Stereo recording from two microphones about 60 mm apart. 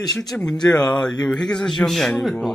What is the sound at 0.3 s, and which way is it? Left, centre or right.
Speech, centre.